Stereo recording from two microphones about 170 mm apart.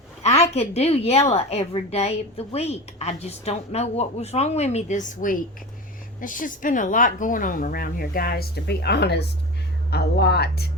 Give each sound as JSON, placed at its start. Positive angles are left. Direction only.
{"t": 0.2, "sound": "a woman's voice", "side_deg": 40}